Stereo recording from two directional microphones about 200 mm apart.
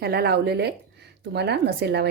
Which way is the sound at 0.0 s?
55° right (ahead or behind).